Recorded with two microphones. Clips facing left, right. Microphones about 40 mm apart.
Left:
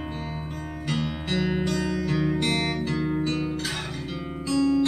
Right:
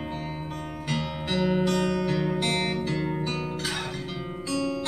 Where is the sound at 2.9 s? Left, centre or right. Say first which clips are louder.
Left 3 dB; centre.